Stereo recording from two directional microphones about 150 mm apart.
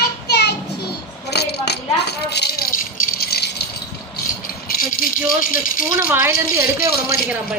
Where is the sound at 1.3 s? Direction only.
90° left.